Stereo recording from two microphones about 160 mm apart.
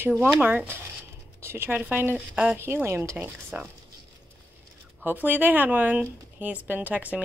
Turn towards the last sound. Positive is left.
turn(degrees=-10)  # may be behind; listen again after turning